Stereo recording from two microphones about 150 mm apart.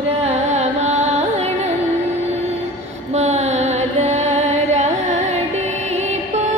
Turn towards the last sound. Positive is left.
turn(degrees=-50)  # may be behind; listen again after turning